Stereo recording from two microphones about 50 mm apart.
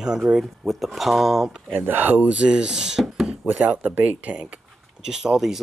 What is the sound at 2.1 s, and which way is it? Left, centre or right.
Speech, right.